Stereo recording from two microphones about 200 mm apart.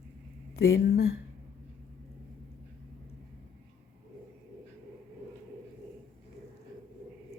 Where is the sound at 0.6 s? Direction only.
55° left (ahead or behind).